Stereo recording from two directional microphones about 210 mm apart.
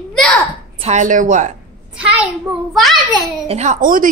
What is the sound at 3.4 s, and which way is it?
Speech, 30° right (ahead or behind).